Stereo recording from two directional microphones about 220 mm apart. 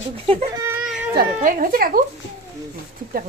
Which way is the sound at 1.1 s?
40° right (ahead or behind).